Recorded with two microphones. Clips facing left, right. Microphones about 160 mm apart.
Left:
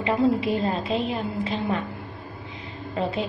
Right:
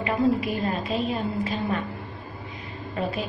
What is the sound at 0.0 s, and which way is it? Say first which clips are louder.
A woman's voice: left 1 dB; 25° left (ahead or behind).